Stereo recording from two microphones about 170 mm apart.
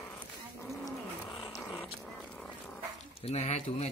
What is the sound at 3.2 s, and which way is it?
Speech, 40° left (ahead or behind).